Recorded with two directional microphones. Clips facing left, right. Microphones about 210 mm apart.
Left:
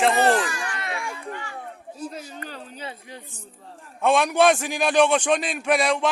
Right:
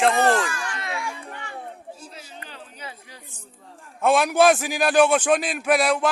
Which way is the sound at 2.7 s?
25° left (ahead or behind).